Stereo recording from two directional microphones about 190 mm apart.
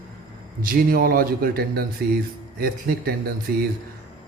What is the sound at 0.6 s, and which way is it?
A man's voice, 50° right (ahead or behind).